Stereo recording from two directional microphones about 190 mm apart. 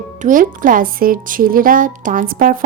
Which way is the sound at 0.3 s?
45° right (ahead or behind).